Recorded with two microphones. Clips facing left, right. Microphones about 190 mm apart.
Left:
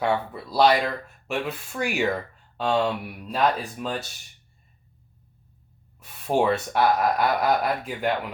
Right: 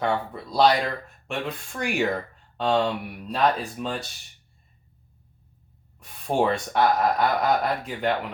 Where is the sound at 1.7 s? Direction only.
5° left (ahead or behind).